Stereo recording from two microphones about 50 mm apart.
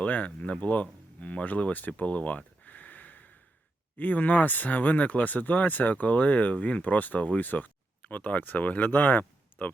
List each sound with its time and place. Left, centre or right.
0.0 s speech: left